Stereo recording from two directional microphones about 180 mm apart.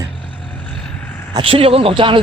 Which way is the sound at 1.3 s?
30° right (ahead or behind).